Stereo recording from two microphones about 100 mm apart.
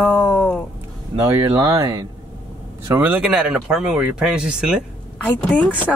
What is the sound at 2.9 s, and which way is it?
Speech, 15° right (ahead or behind).